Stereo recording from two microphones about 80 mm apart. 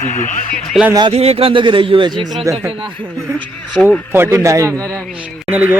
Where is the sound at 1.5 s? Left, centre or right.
Right.